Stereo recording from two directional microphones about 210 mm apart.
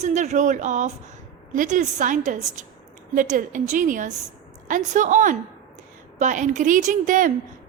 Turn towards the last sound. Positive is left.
turn(degrees=-40)  # may be behind; listen again after turning